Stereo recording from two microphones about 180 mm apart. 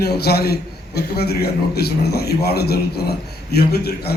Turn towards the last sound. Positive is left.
turn(degrees=60)  # may be behind; listen again after turning